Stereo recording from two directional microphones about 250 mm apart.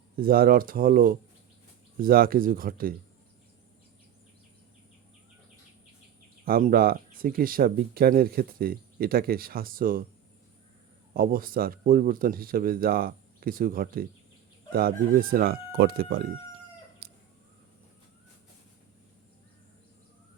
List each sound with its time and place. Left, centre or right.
0.2 s speech: right
6.4 s speech: right
11.1 s speech: right
17.0 s chicken: right